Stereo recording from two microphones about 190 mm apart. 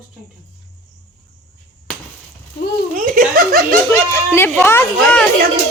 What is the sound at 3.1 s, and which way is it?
Speech, 50° right (ahead or behind).